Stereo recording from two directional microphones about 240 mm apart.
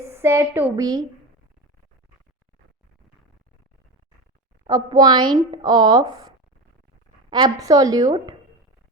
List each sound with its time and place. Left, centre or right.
0.0 s a woman's voice: centre
4.6 s a woman's voice: centre
7.3 s a woman's voice: centre